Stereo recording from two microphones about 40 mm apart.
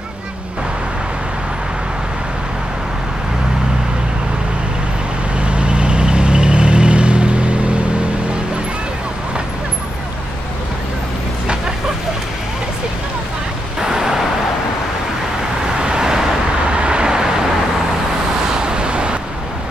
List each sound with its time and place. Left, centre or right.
5.4 s vehicle: right
13.7 s vehicle: centre
15.6 s vehicle: centre
16.7 s vehicle: right
18.5 s vehicle: right